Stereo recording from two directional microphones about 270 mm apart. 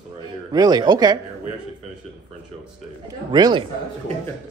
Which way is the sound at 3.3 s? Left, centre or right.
Centre.